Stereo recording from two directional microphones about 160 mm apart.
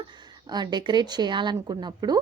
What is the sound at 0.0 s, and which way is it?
Speech, 25° right (ahead or behind).